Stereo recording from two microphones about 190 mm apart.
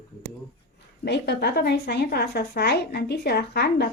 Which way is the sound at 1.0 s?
60° left (ahead or behind).